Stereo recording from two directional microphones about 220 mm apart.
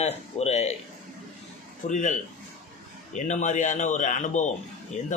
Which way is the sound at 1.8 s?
35° left (ahead or behind).